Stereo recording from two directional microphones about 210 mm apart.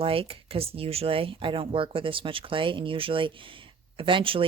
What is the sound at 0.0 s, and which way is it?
Speech, 25° right (ahead or behind).